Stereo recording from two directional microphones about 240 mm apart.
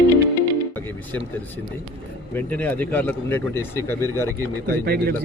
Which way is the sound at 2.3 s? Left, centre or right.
Centre.